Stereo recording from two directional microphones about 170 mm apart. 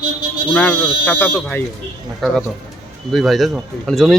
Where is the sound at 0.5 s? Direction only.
5° left (ahead or behind).